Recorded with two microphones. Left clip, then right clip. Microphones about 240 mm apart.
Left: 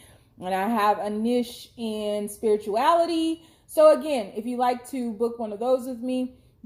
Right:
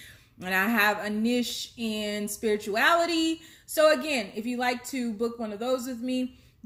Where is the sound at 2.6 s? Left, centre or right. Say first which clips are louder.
Left 1 dB; right.